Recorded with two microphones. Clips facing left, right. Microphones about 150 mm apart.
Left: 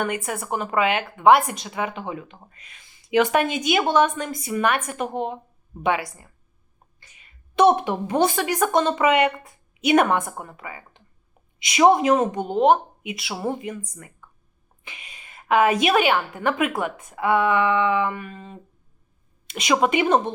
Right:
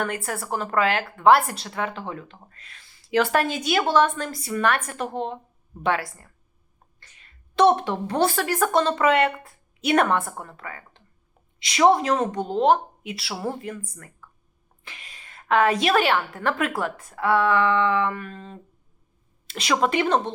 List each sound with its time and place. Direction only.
0.0 s a woman's voice: centre (ahead or behind)
7.0 s a sound: 5° left (ahead or behind)
7.9 s a woman's voice: 5° left (ahead or behind)
12.1 s a woman's voice: 5° left (ahead or behind)
14.8 s a woman's voice: centre (ahead or behind)